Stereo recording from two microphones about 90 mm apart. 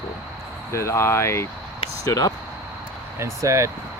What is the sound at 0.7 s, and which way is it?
Speech, 30° left (ahead or behind).